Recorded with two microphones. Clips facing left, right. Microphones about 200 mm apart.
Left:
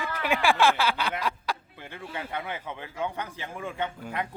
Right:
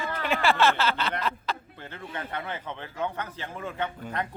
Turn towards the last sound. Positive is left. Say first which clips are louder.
# even
turn(degrees=10)  # may be behind; listen again after turning